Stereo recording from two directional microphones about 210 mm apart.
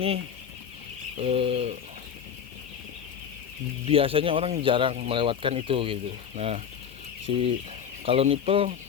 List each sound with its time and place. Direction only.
1.2 s speech: 30° right (ahead or behind)
3.8 s speech: 25° right (ahead or behind)